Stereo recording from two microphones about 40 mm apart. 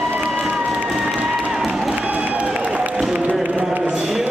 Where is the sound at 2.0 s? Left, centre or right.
Right.